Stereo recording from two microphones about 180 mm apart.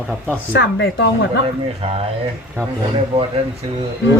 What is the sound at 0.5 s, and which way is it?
Speech, 80° left.